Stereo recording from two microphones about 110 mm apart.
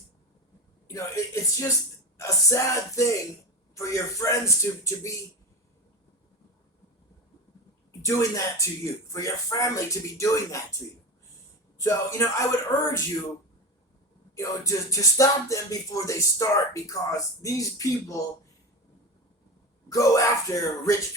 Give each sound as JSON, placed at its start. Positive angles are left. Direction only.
{"t": 0.9, "sound": "music", "side_deg": 30}
{"t": 8.0, "sound": "music", "side_deg": 25}
{"t": 11.8, "sound": "music", "side_deg": 25}
{"t": 14.3, "sound": "music", "side_deg": 30}
{"t": 19.9, "sound": "speech", "side_deg": 30}